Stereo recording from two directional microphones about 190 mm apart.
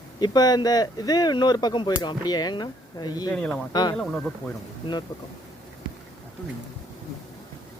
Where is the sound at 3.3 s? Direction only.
5° left (ahead or behind).